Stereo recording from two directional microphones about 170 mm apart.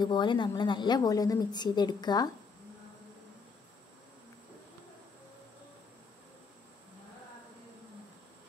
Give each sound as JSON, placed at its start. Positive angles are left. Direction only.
{"t": 0.0, "sound": "a woman's voice", "side_deg": 25}